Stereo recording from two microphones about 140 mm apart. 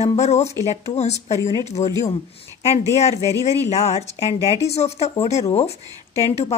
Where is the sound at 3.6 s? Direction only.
50° left (ahead or behind).